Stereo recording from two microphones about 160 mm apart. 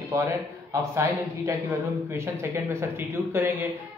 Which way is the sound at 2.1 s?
15° right (ahead or behind).